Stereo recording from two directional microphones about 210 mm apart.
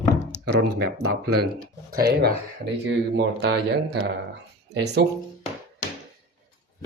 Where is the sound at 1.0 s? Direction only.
50° right (ahead or behind).